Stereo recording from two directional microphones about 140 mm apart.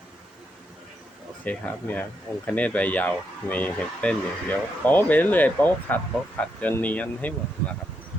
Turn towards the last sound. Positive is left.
turn(degrees=10)  # may be behind; listen again after turning